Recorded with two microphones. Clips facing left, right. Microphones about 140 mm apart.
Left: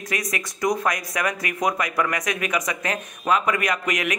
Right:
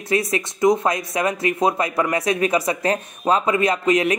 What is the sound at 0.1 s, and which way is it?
Speech, 30° right (ahead or behind).